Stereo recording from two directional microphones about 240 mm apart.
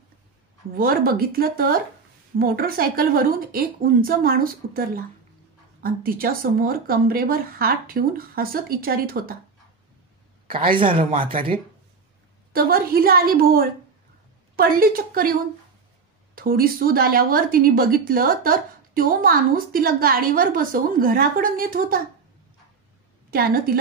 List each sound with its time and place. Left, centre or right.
0.7 s speech: right
10.8 s speech: right
12.5 s speech: right
16.3 s speech: right
23.3 s speech: right